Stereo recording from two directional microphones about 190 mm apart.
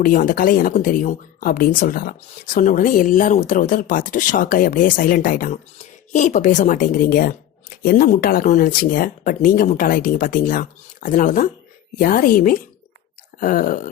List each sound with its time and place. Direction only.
0.0 s speech: 45° left (ahead or behind)